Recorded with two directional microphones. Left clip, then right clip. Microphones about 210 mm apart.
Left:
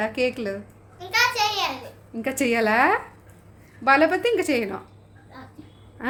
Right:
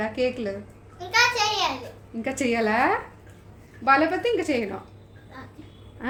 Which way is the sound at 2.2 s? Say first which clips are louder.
Left 2 dB; 25° left (ahead or behind).